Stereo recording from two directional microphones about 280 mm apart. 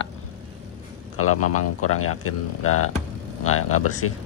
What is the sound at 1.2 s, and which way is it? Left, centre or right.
Speech, left.